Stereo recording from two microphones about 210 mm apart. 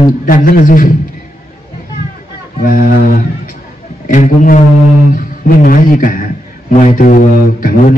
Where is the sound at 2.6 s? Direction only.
40° left (ahead or behind).